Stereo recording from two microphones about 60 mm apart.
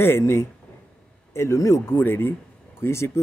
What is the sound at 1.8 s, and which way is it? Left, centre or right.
Speech, left.